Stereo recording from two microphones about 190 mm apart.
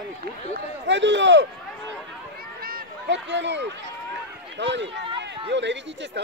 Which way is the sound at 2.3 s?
50° right (ahead or behind).